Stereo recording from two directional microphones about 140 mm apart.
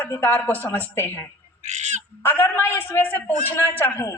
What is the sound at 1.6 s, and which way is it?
Speech, 55° right (ahead or behind).